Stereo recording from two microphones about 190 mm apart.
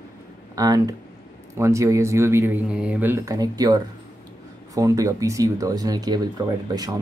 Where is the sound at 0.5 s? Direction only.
20° right (ahead or behind).